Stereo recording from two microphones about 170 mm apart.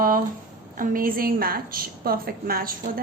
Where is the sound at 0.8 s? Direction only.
55° right (ahead or behind).